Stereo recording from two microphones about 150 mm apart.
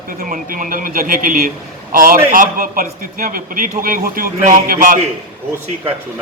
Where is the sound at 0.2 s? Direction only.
70° right (ahead or behind).